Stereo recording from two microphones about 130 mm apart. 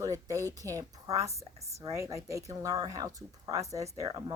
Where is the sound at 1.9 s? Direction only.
20° right (ahead or behind).